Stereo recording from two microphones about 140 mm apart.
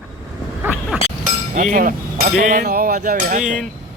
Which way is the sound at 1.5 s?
70° right (ahead or behind).